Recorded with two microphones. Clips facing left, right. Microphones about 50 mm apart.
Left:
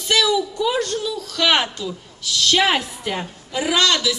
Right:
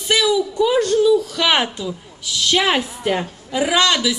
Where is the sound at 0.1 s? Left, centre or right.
Centre.